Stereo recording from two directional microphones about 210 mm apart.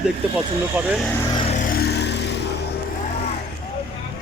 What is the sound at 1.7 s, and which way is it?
Vehicle, 50° left (ahead or behind).